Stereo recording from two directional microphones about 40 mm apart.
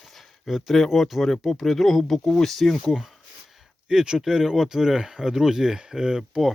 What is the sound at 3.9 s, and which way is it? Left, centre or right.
Speech, centre.